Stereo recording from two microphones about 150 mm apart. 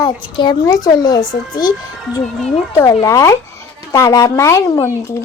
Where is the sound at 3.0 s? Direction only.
20° left (ahead or behind).